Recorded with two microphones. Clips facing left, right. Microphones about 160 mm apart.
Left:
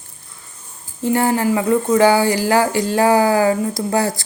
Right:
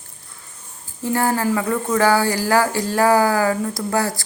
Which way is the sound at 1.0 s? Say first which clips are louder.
Left 3 dB; 20° left (ahead or behind).